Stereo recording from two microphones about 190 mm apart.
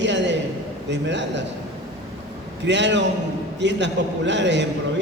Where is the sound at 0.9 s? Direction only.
70° right (ahead or behind).